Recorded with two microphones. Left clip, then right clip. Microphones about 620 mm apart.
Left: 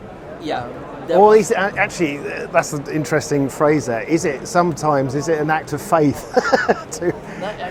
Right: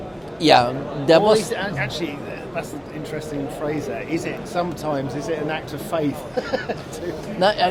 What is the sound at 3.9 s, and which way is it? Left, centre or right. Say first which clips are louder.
Speech: left 7 dB; left.